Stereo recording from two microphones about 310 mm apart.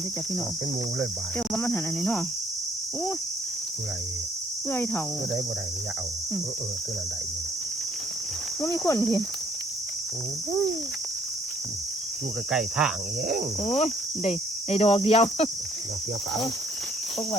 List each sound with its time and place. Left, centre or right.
1.5 s cricket: centre
4.7 s speech: centre
8.6 s speech: centre
12.5 s cricket: centre
13.7 s cricket: centre